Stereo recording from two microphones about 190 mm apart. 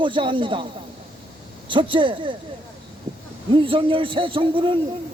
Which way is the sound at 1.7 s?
25° right (ahead or behind).